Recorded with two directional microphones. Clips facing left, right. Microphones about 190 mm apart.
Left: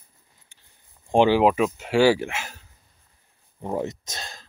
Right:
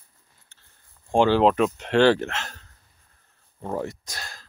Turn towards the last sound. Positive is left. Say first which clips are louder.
# left 2 dB
turn(degrees=20)  # may be behind; listen again after turning